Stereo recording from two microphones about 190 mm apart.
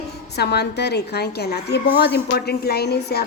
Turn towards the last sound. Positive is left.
turn(degrees=55)  # may be behind; listen again after turning